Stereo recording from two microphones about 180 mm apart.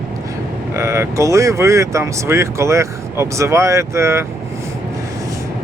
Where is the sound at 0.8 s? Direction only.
15° right (ahead or behind).